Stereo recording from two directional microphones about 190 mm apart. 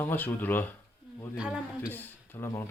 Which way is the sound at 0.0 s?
10° left (ahead or behind).